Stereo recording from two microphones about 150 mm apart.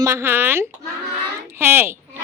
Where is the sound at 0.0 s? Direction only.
15° right (ahead or behind).